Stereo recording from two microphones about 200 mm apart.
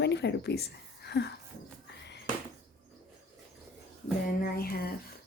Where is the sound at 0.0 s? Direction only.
60° left (ahead or behind).